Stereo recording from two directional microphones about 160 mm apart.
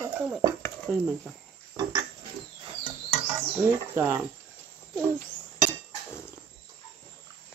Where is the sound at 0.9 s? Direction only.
5° left (ahead or behind).